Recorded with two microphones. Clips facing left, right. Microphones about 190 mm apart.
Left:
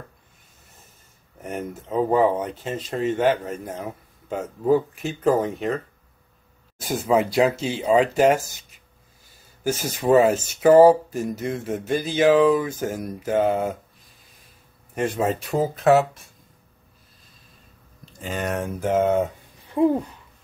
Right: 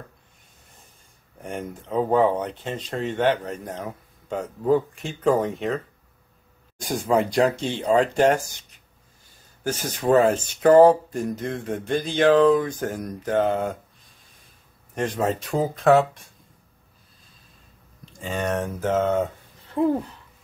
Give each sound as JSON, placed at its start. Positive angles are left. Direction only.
{"t": 1.4, "sound": "speech", "side_deg": 5}
{"t": 6.8, "sound": "speech", "side_deg": 5}
{"t": 15.0, "sound": "speech", "side_deg": 5}
{"t": 18.1, "sound": "speech", "side_deg": 0}